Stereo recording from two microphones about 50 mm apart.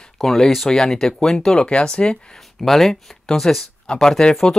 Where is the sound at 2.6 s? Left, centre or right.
Centre.